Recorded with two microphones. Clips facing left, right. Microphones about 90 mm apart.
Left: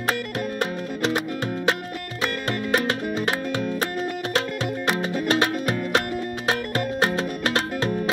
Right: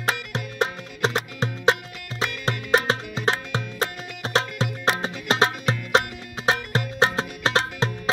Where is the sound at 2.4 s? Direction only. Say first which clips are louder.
Right 2 dB; 25° right (ahead or behind).